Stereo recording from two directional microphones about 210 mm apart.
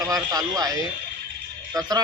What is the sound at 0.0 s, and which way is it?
A man's voice, 15° right (ahead or behind).